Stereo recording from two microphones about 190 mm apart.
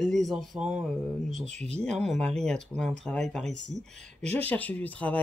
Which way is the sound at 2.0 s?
Centre (ahead or behind).